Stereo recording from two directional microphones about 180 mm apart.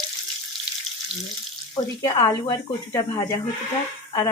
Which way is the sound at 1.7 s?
20° left (ahead or behind).